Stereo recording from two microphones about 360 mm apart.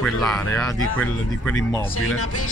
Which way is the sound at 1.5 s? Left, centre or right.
Left.